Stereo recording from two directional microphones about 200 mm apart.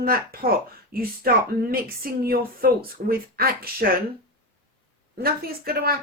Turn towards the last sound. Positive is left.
turn(degrees=-50)  # may be behind; listen again after turning